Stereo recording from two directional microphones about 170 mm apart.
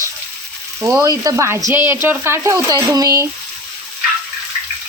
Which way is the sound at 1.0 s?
20° right (ahead or behind).